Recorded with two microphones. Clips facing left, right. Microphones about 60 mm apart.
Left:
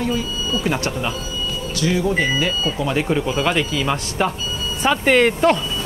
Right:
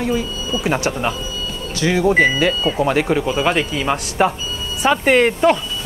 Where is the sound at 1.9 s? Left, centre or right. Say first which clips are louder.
Right 5 dB; right.